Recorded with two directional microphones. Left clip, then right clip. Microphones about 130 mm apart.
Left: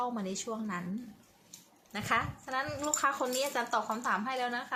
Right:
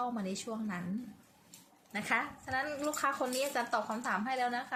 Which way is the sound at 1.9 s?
20° left (ahead or behind).